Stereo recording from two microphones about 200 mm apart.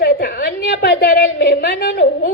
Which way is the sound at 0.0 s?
50° left (ahead or behind).